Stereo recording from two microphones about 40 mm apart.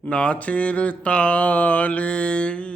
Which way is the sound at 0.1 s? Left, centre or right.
Left.